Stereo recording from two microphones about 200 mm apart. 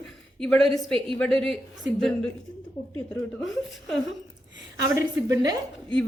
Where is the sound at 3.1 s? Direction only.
Centre (ahead or behind).